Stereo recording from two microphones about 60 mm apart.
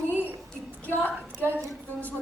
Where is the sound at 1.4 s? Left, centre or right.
Right.